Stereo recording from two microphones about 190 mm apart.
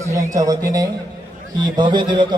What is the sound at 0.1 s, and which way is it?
A man's voice, 15° right (ahead or behind).